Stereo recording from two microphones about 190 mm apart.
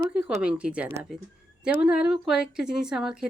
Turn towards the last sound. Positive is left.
turn(degrees=-5)  # may be behind; listen again after turning